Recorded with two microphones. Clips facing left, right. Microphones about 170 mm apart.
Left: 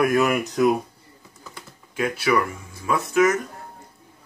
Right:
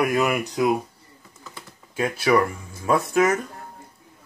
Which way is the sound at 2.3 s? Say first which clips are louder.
Right 4 dB; 35° right (ahead or behind).